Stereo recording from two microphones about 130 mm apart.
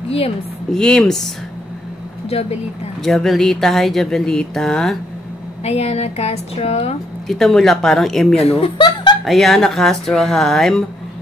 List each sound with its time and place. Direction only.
0.7 s speech: 5° left (ahead or behind)
2.2 s a woman's voice: 50° left (ahead or behind)
3.0 s speech: centre (ahead or behind)
5.6 s a woman's voice: 55° left (ahead or behind)
7.2 s speech: centre (ahead or behind)
8.4 s speech: 50° left (ahead or behind)
9.2 s speech: centre (ahead or behind)